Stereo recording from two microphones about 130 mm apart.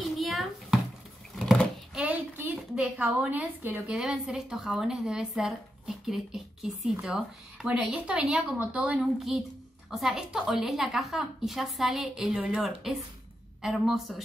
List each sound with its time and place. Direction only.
0.2 s a sound: centre (ahead or behind)
2.0 s child singing: 10° right (ahead or behind)
3.0 s a woman's voice: 10° right (ahead or behind)